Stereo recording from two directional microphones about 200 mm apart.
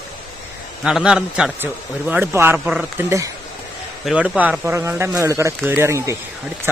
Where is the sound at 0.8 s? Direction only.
5° right (ahead or behind).